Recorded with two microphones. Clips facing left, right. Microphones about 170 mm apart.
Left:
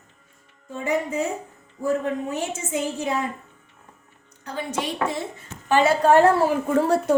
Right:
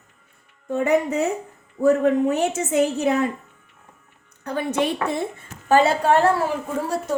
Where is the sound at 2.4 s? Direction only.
65° right (ahead or behind).